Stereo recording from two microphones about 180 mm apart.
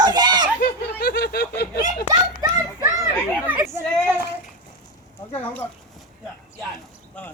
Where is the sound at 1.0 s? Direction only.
60° left (ahead or behind).